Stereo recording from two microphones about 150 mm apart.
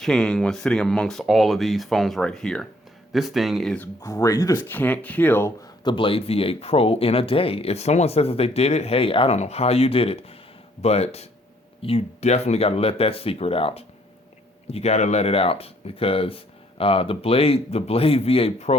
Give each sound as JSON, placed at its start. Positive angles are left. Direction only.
{"t": 0.0, "sound": "speech", "side_deg": 5}
{"t": 4.0, "sound": "speech", "side_deg": 20}
{"t": 5.8, "sound": "speech", "side_deg": 35}